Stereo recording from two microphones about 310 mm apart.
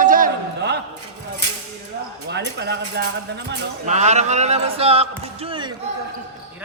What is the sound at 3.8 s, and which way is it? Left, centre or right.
Speech, right.